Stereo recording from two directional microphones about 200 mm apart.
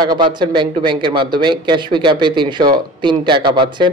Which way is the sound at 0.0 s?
20° right (ahead or behind).